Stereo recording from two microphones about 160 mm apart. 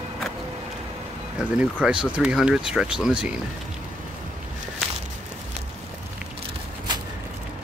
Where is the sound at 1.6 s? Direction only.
5° right (ahead or behind).